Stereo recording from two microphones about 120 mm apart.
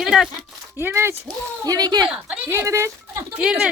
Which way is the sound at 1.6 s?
30° right (ahead or behind).